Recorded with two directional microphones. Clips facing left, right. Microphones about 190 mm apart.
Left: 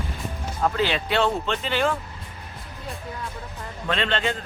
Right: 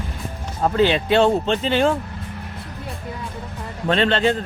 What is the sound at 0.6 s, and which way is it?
Speech, 30° right (ahead or behind).